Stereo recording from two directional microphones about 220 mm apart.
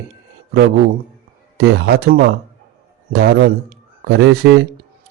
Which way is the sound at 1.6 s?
50° right (ahead or behind).